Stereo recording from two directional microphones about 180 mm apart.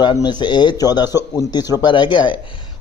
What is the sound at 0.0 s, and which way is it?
Speech, 25° left (ahead or behind).